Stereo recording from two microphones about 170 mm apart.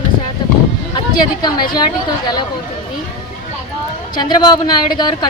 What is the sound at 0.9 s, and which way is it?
A woman's voice, 25° left (ahead or behind).